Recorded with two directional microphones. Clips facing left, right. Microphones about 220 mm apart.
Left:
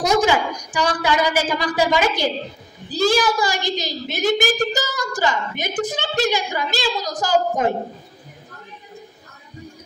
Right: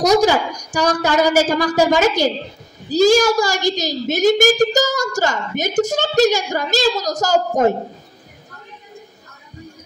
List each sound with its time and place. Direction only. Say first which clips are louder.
0.0 s a woman's voice: right 4 dB; 40° right (ahead or behind)